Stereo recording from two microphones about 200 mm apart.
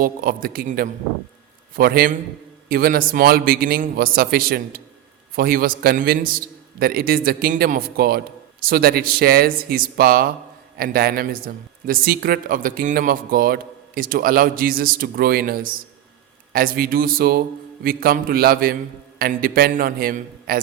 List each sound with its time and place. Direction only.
0.0 s speech: 45° right (ahead or behind)